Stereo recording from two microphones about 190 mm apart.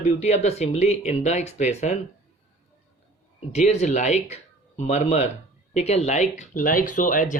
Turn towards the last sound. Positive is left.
turn(degrees=45)  # may be behind; listen again after turning